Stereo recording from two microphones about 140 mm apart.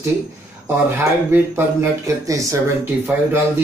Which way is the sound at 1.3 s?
20° right (ahead or behind).